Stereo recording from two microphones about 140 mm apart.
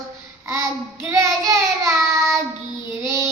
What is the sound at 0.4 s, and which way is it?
Child singing, 20° right (ahead or behind).